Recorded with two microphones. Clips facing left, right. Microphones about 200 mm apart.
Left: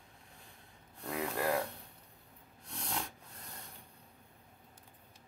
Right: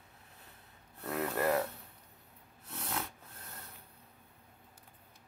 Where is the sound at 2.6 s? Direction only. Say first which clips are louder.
Right 1 dB; 5° right (ahead or behind).